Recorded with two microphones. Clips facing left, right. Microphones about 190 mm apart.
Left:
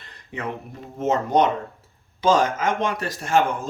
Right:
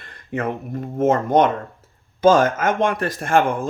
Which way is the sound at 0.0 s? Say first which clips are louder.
Right 6 dB; 50° right (ahead or behind).